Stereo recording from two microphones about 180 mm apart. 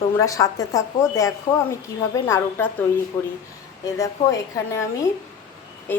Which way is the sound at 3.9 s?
15° left (ahead or behind).